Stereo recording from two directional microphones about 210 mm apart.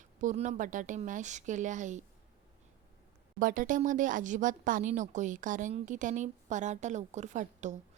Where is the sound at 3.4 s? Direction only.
40° right (ahead or behind).